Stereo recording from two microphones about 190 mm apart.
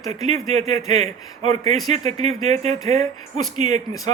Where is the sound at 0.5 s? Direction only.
35° right (ahead or behind).